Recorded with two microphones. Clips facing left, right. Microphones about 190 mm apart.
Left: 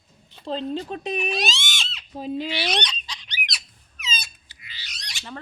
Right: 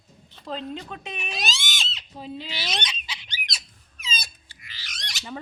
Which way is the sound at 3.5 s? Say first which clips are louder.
Left 1 dB; 30° right (ahead or behind).